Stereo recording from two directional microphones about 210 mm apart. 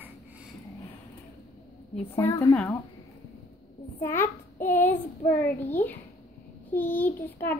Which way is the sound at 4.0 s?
10° left (ahead or behind).